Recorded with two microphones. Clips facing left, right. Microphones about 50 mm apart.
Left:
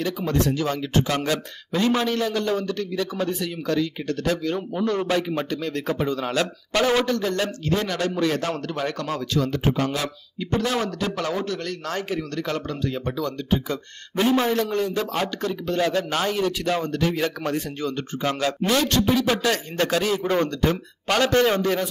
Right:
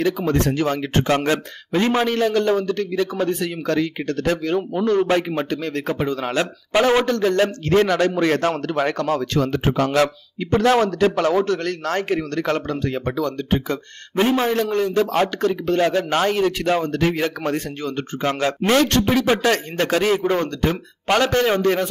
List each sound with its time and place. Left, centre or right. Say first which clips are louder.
0.0 s speech: right 4 dB; right
2.0 s a man's voice: right 5 dB; right
4.6 s a man's voice: right 5 dB; right
7.1 s a man's voice: right 6 dB; right
11.1 s a man's voice: right 8 dB; right
14.5 s speech: right 3 dB; right
15.8 s speech: right 3 dB; right
16.3 s a man's voice: right 4 dB; right
18.6 s a man's voice: right 5 dB; right
19.4 s speech: right 3 dB; right
20.6 s a man's voice: right 2 dB; centre
21.5 s speech: right 4 dB; right